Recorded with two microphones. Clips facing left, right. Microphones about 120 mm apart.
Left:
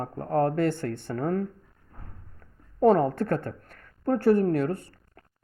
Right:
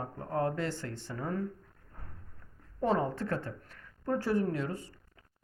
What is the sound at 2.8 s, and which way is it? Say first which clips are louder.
Speech: left 9 dB; 55° left (ahead or behind).